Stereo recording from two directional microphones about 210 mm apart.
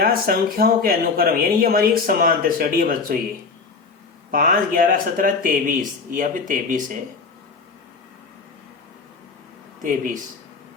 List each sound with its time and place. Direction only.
0.0 s speech: 45° right (ahead or behind)
4.3 s speech: 40° right (ahead or behind)